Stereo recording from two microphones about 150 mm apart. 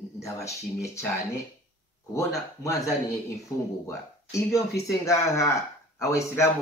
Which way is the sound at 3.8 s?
20° left (ahead or behind).